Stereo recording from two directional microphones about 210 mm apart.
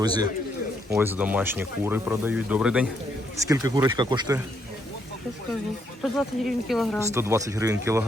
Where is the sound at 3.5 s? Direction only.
15° right (ahead or behind).